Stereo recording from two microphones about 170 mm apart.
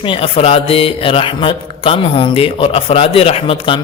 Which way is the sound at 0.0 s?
30° left (ahead or behind).